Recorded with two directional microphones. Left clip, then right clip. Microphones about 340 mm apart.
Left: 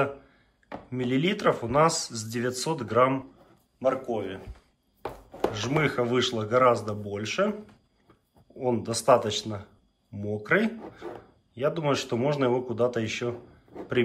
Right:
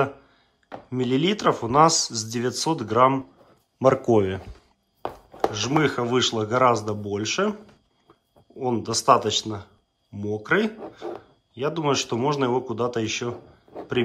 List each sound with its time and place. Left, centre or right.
0.8 s speech: centre
5.5 s speech: centre
8.5 s speech: centre